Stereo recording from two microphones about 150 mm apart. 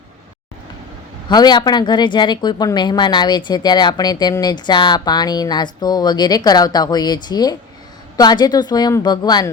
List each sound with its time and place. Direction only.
1.3 s speech: 30° left (ahead or behind)